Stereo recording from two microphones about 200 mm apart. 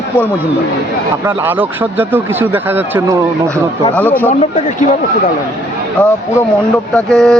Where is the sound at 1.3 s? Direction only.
10° right (ahead or behind).